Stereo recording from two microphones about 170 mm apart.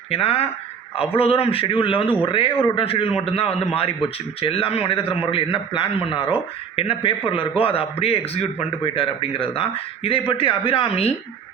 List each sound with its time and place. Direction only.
0.1 s a man's voice: 35° left (ahead or behind)